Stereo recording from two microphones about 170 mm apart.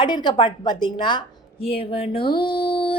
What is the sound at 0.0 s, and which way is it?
A woman's voice, 25° left (ahead or behind).